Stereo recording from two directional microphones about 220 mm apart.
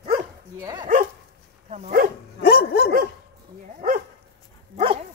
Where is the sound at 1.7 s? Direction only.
35° right (ahead or behind).